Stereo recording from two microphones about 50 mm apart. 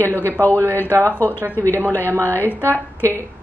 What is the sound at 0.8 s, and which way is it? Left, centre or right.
Speech, right.